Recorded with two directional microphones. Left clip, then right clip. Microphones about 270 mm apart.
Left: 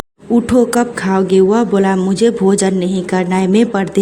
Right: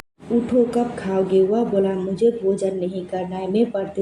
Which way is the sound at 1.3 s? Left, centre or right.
Left.